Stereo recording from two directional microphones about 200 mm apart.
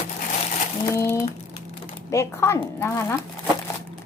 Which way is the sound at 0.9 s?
15° left (ahead or behind).